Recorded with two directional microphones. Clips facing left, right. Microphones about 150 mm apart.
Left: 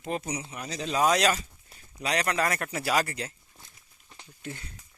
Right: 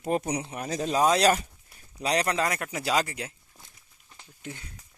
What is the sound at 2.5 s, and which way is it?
Speech, 15° right (ahead or behind).